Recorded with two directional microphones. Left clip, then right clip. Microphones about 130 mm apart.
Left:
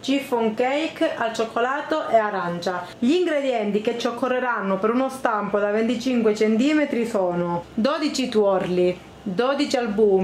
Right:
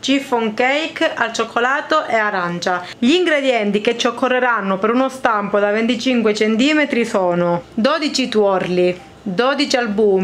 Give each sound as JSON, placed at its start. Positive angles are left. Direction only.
{"t": 0.1, "sound": "a woman's voice", "side_deg": -35}
{"t": 7.8, "sound": "speech", "side_deg": -15}